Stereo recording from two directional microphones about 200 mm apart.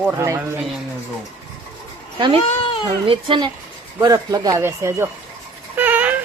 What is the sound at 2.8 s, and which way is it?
Speech, 25° right (ahead or behind).